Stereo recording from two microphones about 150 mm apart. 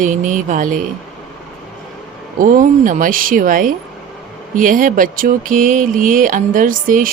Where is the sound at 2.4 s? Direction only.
60° right (ahead or behind).